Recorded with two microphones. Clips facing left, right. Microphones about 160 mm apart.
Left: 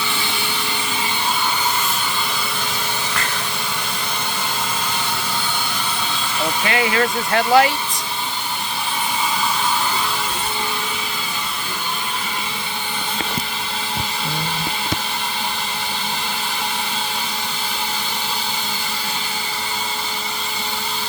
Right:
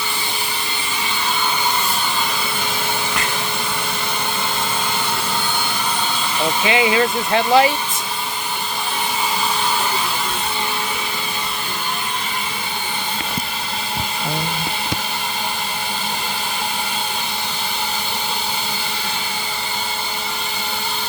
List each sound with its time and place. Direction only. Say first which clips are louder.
6.7 s speech: right 3 dB; 20° right (ahead or behind)